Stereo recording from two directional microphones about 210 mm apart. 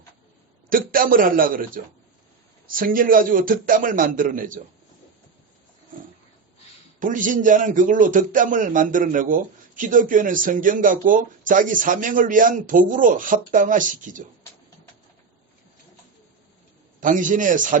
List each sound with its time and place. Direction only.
0.7 s a man's voice: 40° right (ahead or behind)
7.0 s a man's voice: 40° right (ahead or behind)
17.0 s a man's voice: 40° right (ahead or behind)